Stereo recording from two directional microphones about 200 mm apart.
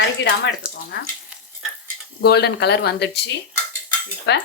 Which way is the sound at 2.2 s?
55° left (ahead or behind).